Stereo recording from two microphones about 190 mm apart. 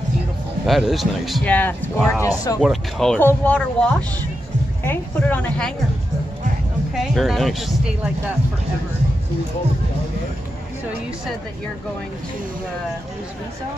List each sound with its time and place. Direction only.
0.7 s speech: centre (ahead or behind); by 2.6 s 20° left (ahead or behind)
2.6 s speech: centre (ahead or behind)
7.0 s speech: centre (ahead or behind)